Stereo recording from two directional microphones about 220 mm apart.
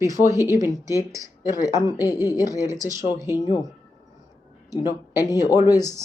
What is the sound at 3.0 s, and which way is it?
Speech, 15° right (ahead or behind).